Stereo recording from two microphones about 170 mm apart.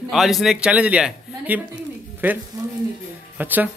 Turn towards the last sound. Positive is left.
turn(degrees=-10)  # may be behind; listen again after turning